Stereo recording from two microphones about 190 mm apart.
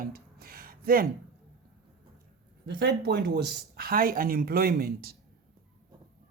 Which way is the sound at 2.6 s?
65° right (ahead or behind).